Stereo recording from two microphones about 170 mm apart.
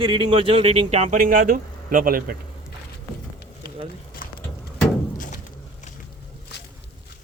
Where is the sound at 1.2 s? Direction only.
55° right (ahead or behind).